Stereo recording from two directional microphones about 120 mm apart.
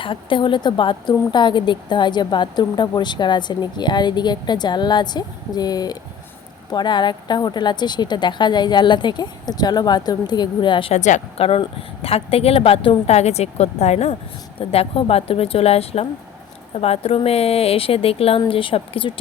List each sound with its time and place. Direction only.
0.0 s a woman's voice: 45° left (ahead or behind)
10.9 s a woman's voice: 80° left
11.3 s a woman's voice: 50° left (ahead or behind)
14.7 s a woman's voice: 55° left (ahead or behind)